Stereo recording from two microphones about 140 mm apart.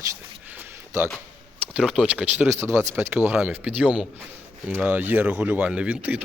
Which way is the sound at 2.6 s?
20° right (ahead or behind).